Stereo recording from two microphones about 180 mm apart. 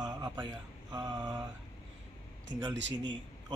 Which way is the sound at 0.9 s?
20° right (ahead or behind).